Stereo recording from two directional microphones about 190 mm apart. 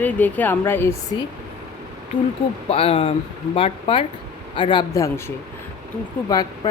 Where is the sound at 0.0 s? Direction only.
10° left (ahead or behind).